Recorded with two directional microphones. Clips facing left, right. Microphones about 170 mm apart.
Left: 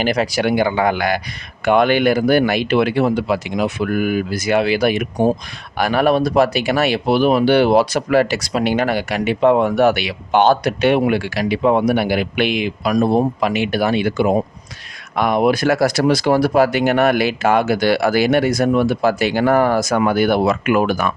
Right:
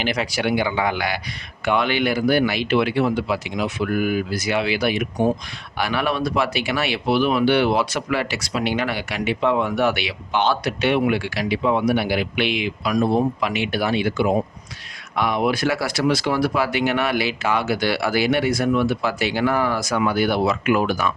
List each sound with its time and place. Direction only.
0.0 s speech: 40° left (ahead or behind)